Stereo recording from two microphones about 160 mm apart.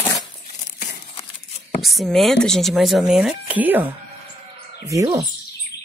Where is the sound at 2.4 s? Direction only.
Centre (ahead or behind).